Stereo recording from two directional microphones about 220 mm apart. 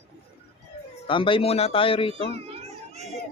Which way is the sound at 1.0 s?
25° left (ahead or behind).